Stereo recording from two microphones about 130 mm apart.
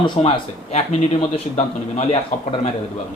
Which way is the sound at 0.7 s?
50° left (ahead or behind).